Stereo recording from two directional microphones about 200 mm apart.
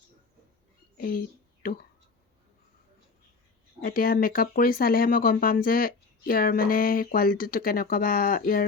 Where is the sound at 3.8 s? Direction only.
45° left (ahead or behind).